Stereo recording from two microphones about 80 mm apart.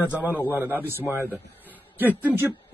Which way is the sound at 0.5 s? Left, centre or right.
Right.